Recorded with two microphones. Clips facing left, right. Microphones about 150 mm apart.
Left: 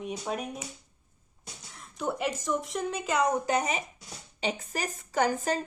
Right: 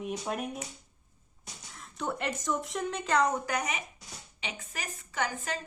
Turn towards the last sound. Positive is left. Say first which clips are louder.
# left 7 dB
turn(degrees=40)  # may be behind; listen again after turning